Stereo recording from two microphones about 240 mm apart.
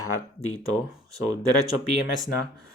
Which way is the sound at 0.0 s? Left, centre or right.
Left.